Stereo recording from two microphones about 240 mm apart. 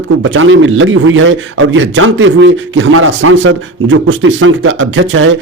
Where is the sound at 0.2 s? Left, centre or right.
Right.